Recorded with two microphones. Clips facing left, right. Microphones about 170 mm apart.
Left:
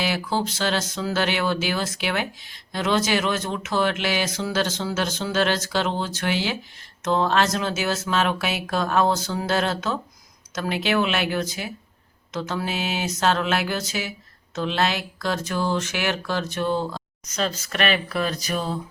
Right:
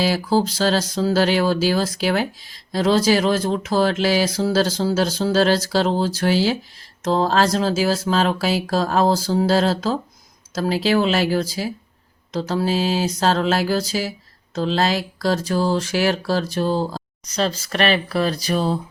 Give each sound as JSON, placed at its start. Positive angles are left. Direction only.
{"t": 0.0, "sound": "speech", "side_deg": -35}